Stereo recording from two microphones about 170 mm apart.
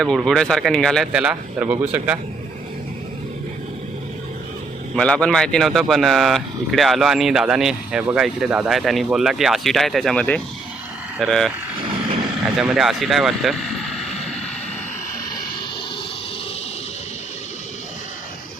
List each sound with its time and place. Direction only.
0.0 s speech: centre (ahead or behind)
4.9 s speech: 5° left (ahead or behind)
12.5 s speech: centre (ahead or behind)